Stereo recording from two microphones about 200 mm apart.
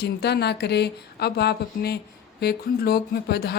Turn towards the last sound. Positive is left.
turn(degrees=50)  # may be behind; listen again after turning